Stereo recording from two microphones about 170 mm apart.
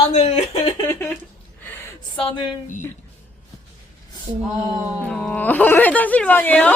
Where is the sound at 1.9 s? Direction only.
30° left (ahead or behind).